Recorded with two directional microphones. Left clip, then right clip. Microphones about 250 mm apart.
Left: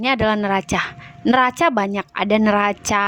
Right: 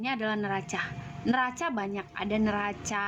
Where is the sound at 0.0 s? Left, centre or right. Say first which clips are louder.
Left 13 dB; left.